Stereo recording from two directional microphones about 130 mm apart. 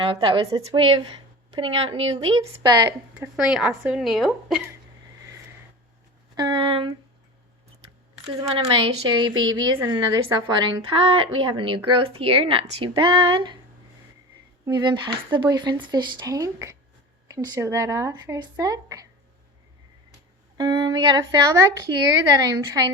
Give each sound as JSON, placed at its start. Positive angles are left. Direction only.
{"t": 0.0, "sound": "speech", "side_deg": -35}
{"t": 2.4, "sound": "speech", "side_deg": -30}
{"t": 3.2, "sound": "a woman's voice", "side_deg": -5}
{"t": 6.3, "sound": "speech", "side_deg": -35}
{"t": 8.5, "sound": "speech", "side_deg": -45}
{"t": 14.6, "sound": "speech", "side_deg": -35}
{"t": 20.6, "sound": "speech", "side_deg": -35}